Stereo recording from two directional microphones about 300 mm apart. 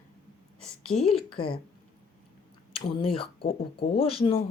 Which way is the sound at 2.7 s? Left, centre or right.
Centre.